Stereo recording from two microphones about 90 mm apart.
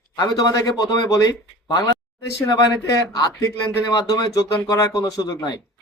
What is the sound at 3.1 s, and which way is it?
A man's voice, 45° left (ahead or behind).